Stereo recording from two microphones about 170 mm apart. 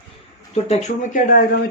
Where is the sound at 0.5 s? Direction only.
40° left (ahead or behind).